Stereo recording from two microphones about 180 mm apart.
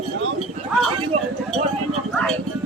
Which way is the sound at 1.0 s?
30° right (ahead or behind).